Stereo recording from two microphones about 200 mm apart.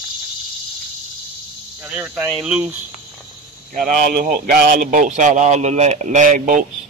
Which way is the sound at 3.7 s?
40° right (ahead or behind).